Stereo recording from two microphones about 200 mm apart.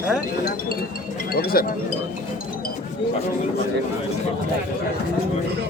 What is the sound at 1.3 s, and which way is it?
Speech, 50° left (ahead or behind).